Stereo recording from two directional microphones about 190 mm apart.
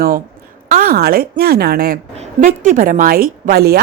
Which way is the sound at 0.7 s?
50° right (ahead or behind).